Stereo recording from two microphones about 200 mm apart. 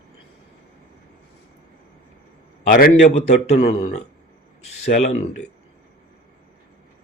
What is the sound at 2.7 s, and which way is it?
Speech, 40° left (ahead or behind).